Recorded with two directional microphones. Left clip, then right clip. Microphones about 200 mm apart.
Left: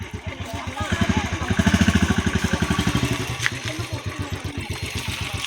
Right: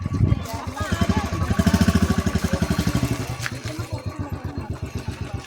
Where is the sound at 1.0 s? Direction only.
55° right (ahead or behind).